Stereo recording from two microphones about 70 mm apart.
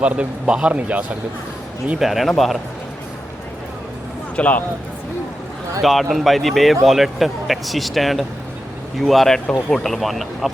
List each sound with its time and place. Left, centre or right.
0.0 s a man's voice: centre
2.0 s speech: centre
4.4 s speech: left
5.8 s speech: centre